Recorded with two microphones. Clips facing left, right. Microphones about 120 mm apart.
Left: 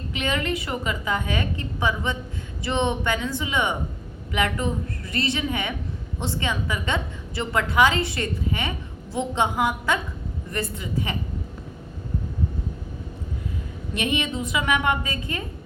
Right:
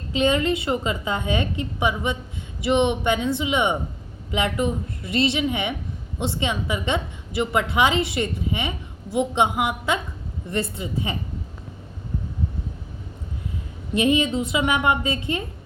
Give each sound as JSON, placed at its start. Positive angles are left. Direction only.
{"t": 0.1, "sound": "a woman's voice", "side_deg": -25}
{"t": 13.9, "sound": "a woman's voice", "side_deg": -25}